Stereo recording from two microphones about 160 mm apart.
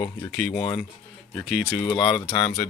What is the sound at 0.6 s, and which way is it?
Speech, 35° left (ahead or behind).